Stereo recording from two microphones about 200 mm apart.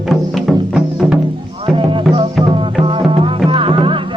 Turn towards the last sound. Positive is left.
turn(degrees=-25)  # may be behind; listen again after turning